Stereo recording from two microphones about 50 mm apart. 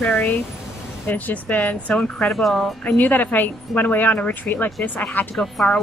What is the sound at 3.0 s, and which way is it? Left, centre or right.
Speech, left.